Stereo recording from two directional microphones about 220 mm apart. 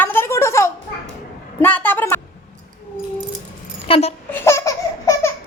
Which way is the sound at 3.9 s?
30° left (ahead or behind).